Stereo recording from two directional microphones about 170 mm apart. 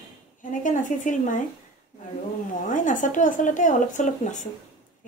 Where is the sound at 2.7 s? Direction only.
50° left (ahead or behind).